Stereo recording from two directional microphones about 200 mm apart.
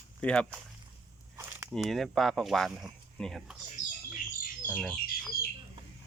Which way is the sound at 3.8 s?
40° left (ahead or behind).